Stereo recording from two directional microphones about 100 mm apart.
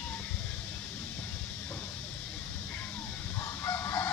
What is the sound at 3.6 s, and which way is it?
Fowl, 30° left (ahead or behind).